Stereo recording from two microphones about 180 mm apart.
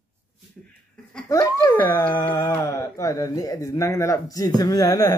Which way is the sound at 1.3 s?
15° left (ahead or behind).